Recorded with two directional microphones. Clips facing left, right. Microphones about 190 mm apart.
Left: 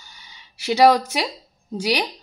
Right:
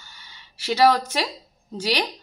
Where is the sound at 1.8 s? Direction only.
10° left (ahead or behind).